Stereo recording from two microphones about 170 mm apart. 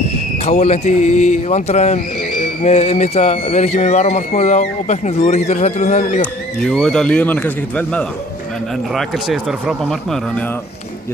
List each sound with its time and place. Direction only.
0.5 s speech: 40° left (ahead or behind)
6.6 s speech: 5° left (ahead or behind)